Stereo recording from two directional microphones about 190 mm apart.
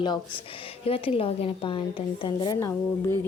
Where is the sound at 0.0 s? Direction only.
25° left (ahead or behind).